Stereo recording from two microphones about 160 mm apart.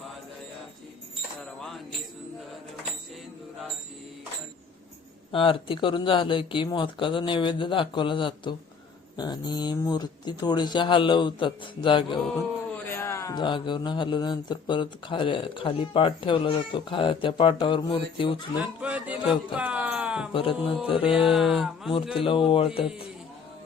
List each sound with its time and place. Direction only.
5.3 s speech: 35° left (ahead or behind)
12.7 s speech: 15° left (ahead or behind); by 18.3 s 30° left (ahead or behind)
18.6 s speech: 10° right (ahead or behind)
19.5 s a sound: 10° right (ahead or behind)
20.3 s speech: 35° left (ahead or behind)
21.3 s speech: centre (ahead or behind)
22.2 s speech: 35° left (ahead or behind)